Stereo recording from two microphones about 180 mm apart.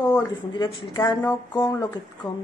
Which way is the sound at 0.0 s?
15° left (ahead or behind).